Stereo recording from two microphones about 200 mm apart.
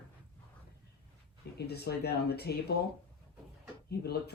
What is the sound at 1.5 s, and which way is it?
Speech, 55° left (ahead or behind).